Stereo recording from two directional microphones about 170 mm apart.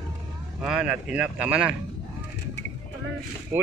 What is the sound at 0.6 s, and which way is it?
Speech, 5° right (ahead or behind).